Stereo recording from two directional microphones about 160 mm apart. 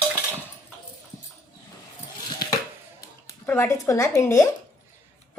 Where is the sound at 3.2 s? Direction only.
15° left (ahead or behind).